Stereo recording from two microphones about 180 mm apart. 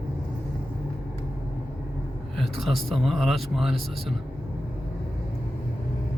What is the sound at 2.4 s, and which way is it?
Speech, centre (ahead or behind).